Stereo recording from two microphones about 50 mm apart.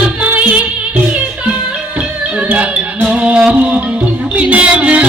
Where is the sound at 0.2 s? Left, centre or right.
Right.